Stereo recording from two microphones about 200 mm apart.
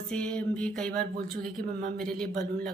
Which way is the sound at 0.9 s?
45° right (ahead or behind).